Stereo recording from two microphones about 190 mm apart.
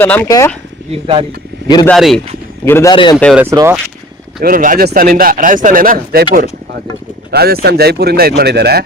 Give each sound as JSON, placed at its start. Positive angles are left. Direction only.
{"t": 0.0, "sound": "speech", "side_deg": 10}
{"t": 0.9, "sound": "speech", "side_deg": -30}
{"t": 1.6, "sound": "speech", "side_deg": 25}
{"t": 1.9, "sound": "speech", "side_deg": 0}
{"t": 2.6, "sound": "speech", "side_deg": 10}
{"t": 2.9, "sound": "speech", "side_deg": 25}
{"t": 3.3, "sound": "speech", "side_deg": -15}
{"t": 4.4, "sound": "speech", "side_deg": -50}
{"t": 7.3, "sound": "speech", "side_deg": -55}